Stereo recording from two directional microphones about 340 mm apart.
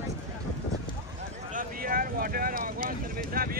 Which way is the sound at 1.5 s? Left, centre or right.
Right.